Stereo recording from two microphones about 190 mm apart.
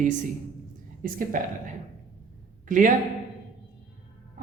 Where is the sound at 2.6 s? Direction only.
45° right (ahead or behind).